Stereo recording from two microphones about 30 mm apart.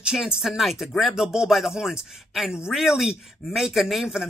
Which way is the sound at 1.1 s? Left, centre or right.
Right.